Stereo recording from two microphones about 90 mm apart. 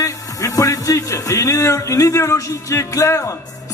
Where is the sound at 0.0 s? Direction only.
40° left (ahead or behind).